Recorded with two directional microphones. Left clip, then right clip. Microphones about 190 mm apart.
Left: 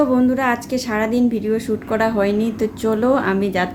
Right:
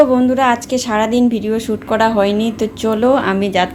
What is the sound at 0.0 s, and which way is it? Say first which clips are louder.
A woman's voice: right 6 dB; 5° right (ahead or behind).